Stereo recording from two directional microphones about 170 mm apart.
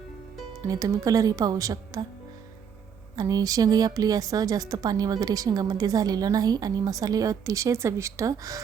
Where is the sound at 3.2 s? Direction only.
20° right (ahead or behind).